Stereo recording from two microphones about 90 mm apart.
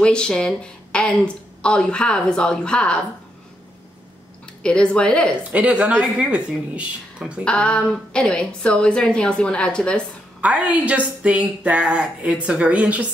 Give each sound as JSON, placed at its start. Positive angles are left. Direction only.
{"t": 0.0, "sound": "a woman's voice", "side_deg": 10}
{"t": 4.6, "sound": "a woman's voice", "side_deg": 10}
{"t": 5.5, "sound": "speech", "side_deg": -15}
{"t": 7.4, "sound": "a woman's voice", "side_deg": 10}
{"t": 10.4, "sound": "speech", "side_deg": -15}